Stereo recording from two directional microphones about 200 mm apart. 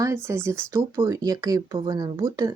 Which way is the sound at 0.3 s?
15° right (ahead or behind).